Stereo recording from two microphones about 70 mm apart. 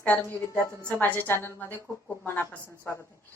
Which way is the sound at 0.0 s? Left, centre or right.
Left.